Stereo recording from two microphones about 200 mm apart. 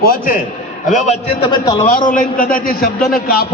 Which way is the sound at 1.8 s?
40° left (ahead or behind).